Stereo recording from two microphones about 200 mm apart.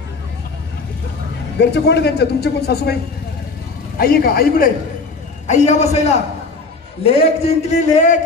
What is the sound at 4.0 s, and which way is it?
Speech, 45° left (ahead or behind).